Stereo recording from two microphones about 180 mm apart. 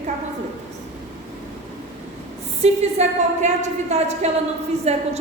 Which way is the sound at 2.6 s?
35° right (ahead or behind).